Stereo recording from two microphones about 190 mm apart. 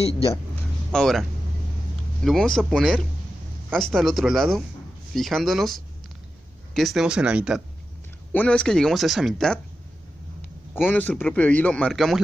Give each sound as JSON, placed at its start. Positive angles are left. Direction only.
{"t": 0.9, "sound": "speech", "side_deg": 0}
{"t": 2.2, "sound": "speech", "side_deg": 0}
{"t": 8.3, "sound": "speech", "side_deg": 5}
{"t": 10.9, "sound": "speech", "side_deg": 10}